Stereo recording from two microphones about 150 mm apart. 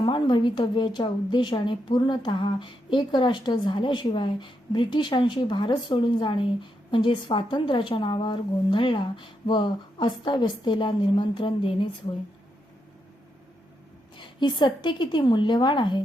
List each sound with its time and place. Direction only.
0.0 s a woman's voice: 30° left (ahead or behind)
14.2 s a woman's voice: 30° left (ahead or behind)